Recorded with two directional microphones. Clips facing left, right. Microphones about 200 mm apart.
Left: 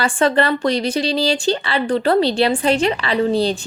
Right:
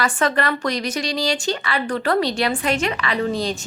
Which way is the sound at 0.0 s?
30° left (ahead or behind).